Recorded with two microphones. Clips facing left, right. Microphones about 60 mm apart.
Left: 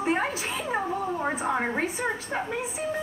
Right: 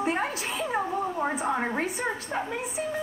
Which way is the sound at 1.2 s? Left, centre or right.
Centre.